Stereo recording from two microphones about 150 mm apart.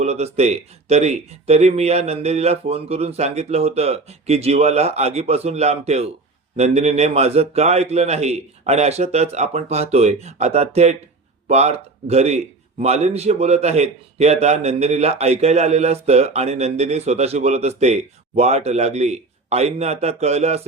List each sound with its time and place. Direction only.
0.0 s a man's voice: 45° right (ahead or behind)